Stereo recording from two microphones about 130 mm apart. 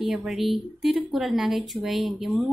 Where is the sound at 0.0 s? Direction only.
5° right (ahead or behind).